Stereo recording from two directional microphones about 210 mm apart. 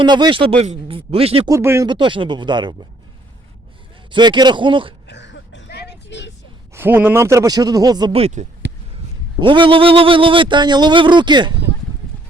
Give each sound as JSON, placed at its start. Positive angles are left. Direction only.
{"t": 0.0, "sound": "speech", "side_deg": -20}
{"t": 1.5, "sound": "speech", "side_deg": -15}
{"t": 4.1, "sound": "speech", "side_deg": -20}
{"t": 5.0, "sound": "a sound", "side_deg": 55}
{"t": 6.7, "sound": "a man's voice", "side_deg": -10}